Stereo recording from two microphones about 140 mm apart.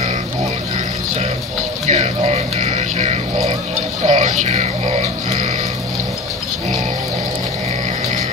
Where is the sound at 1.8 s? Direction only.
55° right (ahead or behind).